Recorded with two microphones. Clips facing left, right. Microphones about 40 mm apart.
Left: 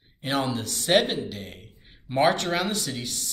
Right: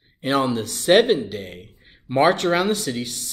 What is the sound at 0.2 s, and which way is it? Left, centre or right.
Speech, centre.